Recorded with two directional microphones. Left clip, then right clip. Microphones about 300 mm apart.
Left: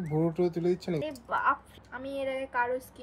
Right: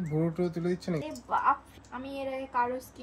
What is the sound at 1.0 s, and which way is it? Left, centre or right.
A woman's voice, centre.